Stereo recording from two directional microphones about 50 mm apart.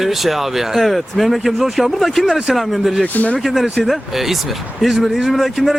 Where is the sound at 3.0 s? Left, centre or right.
Left.